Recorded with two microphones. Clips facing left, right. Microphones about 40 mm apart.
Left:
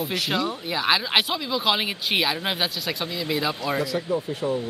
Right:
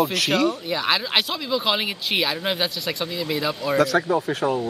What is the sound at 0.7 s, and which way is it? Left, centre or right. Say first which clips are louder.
Speech: even; centre.